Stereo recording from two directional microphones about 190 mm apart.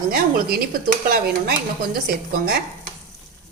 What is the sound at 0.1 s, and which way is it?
A woman's voice, 55° right (ahead or behind).